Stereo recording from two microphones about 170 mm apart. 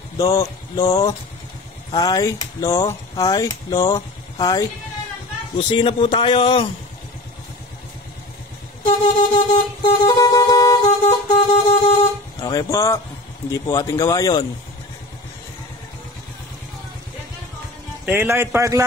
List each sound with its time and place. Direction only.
0.2 s speech: 20° left (ahead or behind)
8.8 s music: 35° left (ahead or behind)
10.0 s vehicle: 25° left (ahead or behind)
13.5 s speech: 20° left (ahead or behind)
18.0 s a man's voice: 10° right (ahead or behind)